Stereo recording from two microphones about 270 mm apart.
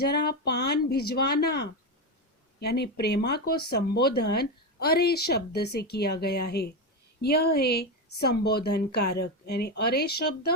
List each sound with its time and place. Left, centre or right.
0.0 s a woman's voice: left